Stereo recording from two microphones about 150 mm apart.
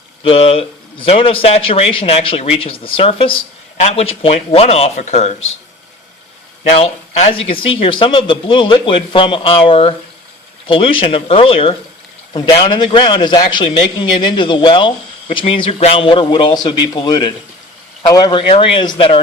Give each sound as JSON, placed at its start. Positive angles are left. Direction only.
{"t": 0.2, "sound": "a man's voice", "side_deg": 40}
{"t": 6.7, "sound": "speech", "side_deg": 45}